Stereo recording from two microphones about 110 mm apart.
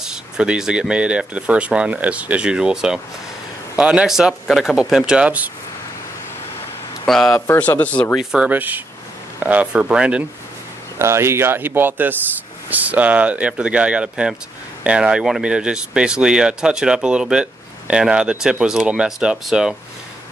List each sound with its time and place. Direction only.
0.0 s speech: 5° right (ahead or behind)
7.1 s speech: 5° left (ahead or behind)
7.3 s speech: 20° left (ahead or behind)
8.2 s speech: 5° right (ahead or behind)
11.0 s speech: 25° right (ahead or behind); by 19.7 s 5° right (ahead or behind)